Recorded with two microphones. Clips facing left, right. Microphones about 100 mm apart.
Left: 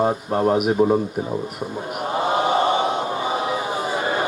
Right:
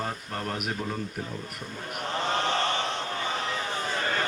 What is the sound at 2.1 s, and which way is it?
Chant, 10° left (ahead or behind).